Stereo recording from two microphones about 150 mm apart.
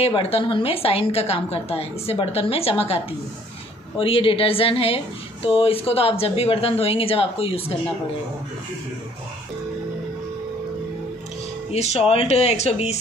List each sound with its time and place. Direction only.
0.0 s a woman's voice: 40° left (ahead or behind)
4.0 s a woman's voice: 35° left (ahead or behind)
11.7 s speech: 45° left (ahead or behind)